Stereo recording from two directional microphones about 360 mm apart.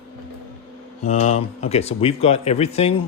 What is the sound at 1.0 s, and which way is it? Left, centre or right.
Speech, centre.